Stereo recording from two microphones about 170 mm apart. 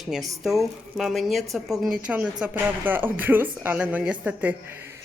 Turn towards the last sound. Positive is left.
turn(degrees=-10)  # may be behind; listen again after turning